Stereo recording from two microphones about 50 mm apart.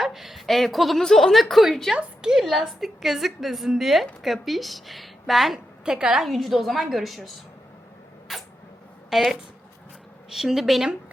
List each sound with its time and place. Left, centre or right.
0.0 s a woman's voice: centre
5.8 s a woman's voice: centre
6.2 s a woman's voice: centre
9.0 s a woman's voice: centre